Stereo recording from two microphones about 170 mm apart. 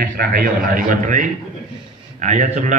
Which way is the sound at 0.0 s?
60° right (ahead or behind).